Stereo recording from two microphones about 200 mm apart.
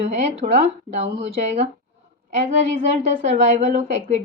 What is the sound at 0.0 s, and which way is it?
A woman's voice, 30° right (ahead or behind).